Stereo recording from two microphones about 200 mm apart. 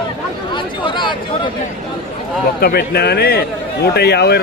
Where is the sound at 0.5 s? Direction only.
25° left (ahead or behind).